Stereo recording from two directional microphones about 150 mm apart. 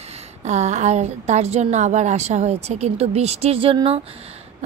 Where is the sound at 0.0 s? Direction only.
45° right (ahead or behind).